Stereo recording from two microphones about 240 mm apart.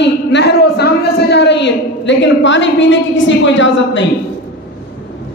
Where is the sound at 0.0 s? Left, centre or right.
Left.